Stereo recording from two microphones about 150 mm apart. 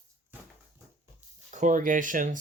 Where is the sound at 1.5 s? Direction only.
55° right (ahead or behind).